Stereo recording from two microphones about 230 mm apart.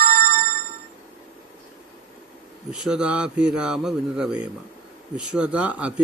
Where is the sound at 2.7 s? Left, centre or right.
Centre.